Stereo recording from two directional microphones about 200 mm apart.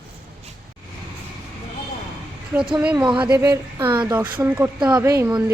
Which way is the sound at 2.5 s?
10° right (ahead or behind).